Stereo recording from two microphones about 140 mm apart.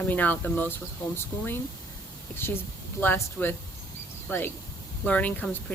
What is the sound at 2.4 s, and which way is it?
Speech, 15° left (ahead or behind).